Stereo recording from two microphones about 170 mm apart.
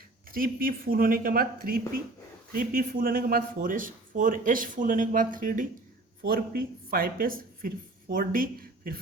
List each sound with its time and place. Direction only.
0.3 s speech: 55° right (ahead or behind)